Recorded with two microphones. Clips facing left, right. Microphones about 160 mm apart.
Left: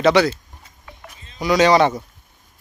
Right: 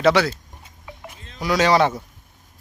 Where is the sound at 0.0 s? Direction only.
5° right (ahead or behind).